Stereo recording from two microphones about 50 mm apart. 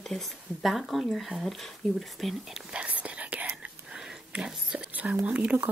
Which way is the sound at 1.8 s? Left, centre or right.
Centre.